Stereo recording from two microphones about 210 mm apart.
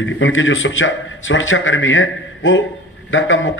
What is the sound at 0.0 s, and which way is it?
A man's voice, 65° left (ahead or behind).